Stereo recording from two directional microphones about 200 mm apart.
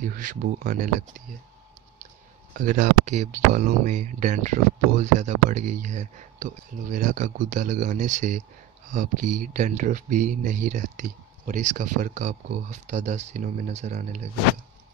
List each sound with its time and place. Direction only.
0.0 s speech: 40° right (ahead or behind)
2.5 s speech: 40° right (ahead or behind)